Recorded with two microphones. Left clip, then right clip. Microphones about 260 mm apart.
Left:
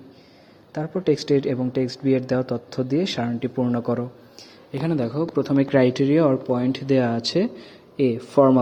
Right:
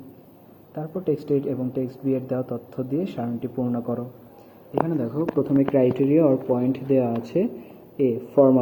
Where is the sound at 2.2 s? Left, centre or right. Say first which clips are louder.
Left 4 dB; left.